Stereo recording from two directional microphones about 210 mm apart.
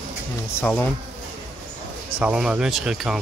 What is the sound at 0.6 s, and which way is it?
Speech, 10° left (ahead or behind).